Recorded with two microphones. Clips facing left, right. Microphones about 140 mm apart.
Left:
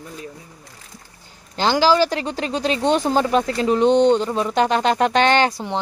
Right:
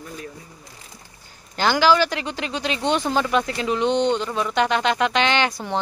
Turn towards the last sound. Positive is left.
turn(degrees=45)  # may be behind; listen again after turning